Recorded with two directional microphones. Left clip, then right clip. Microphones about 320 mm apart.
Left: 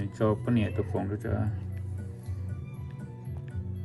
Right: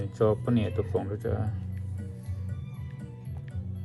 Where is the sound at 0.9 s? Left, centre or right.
Left.